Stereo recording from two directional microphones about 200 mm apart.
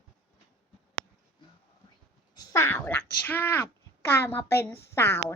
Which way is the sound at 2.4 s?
15° left (ahead or behind).